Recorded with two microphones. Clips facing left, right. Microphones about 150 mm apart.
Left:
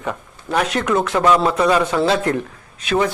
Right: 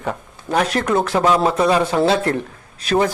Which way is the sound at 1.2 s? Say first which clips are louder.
Left 2 dB; 15° right (ahead or behind).